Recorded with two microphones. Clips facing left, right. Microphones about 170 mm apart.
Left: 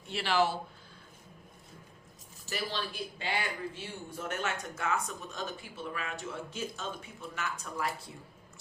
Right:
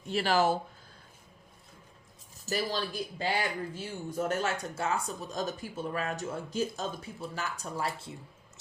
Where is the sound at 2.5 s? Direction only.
40° right (ahead or behind).